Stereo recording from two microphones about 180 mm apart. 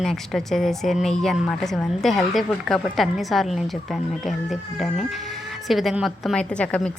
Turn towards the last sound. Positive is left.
turn(degrees=5)  # may be behind; listen again after turning